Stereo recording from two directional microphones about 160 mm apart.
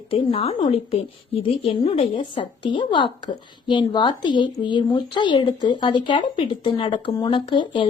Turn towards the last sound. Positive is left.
turn(degrees=30)  # may be behind; listen again after turning